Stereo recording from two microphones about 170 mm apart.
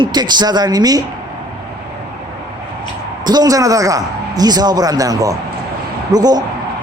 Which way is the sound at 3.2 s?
25° right (ahead or behind).